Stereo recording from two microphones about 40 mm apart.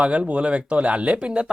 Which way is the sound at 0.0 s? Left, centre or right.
Right.